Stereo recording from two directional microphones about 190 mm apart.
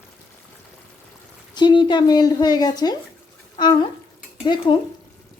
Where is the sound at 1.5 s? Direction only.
25° left (ahead or behind).